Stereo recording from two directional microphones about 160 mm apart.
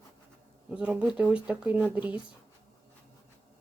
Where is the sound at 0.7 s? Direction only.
5° right (ahead or behind).